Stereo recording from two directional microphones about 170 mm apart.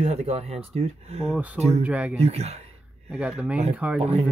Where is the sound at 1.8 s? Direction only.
10° right (ahead or behind).